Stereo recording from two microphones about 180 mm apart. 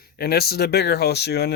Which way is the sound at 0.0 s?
60° left (ahead or behind).